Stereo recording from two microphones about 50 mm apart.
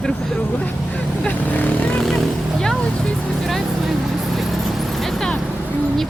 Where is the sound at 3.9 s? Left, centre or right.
Centre.